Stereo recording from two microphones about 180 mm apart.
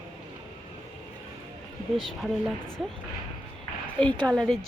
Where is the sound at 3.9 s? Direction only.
5° left (ahead or behind).